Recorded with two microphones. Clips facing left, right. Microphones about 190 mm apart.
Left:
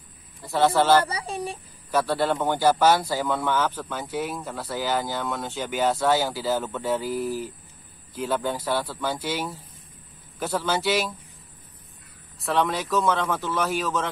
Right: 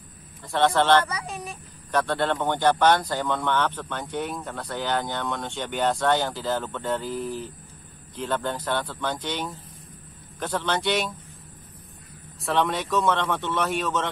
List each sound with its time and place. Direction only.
0.4 s a man's voice: 5° left (ahead or behind)
1.0 s speech: 30° left (ahead or behind)
1.9 s a man's voice: 5° left (ahead or behind)
12.4 s a man's voice: centre (ahead or behind)